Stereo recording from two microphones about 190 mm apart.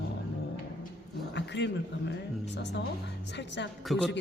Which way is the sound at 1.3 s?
65° left (ahead or behind).